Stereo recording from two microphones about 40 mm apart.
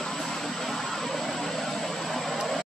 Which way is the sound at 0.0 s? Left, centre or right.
Centre.